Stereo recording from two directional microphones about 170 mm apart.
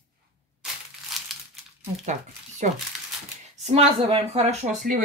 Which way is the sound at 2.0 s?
45° right (ahead or behind).